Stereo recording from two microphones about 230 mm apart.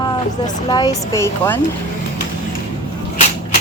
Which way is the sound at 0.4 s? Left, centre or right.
Centre.